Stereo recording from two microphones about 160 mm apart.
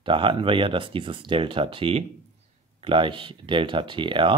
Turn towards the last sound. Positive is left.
turn(degrees=-30)  # may be behind; listen again after turning